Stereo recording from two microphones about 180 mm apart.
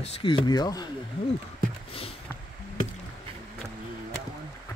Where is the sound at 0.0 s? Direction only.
30° left (ahead or behind).